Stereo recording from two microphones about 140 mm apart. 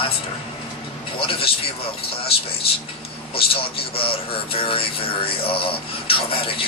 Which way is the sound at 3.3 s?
40° left (ahead or behind).